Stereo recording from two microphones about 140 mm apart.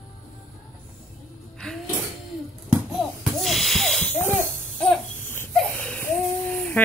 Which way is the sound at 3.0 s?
Centre (ahead or behind).